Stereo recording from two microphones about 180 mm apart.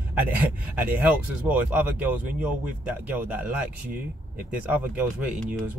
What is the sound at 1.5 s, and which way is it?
A man's voice, 15° right (ahead or behind).